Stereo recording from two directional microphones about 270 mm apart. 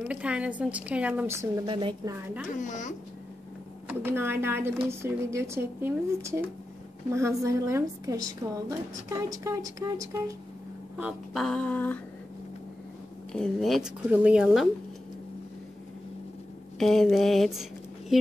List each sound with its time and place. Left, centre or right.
0.1 s a woman's voice: centre
2.5 s speech: left
3.8 s speech: centre
11.0 s a woman's voice: centre
13.3 s a woman's voice: centre
16.7 s a woman's voice: centre